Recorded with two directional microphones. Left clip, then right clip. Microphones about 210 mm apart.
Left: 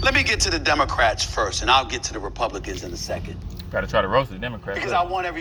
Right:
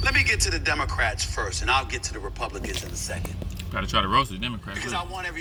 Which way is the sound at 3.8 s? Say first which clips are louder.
Left 1 dB; 15° right (ahead or behind).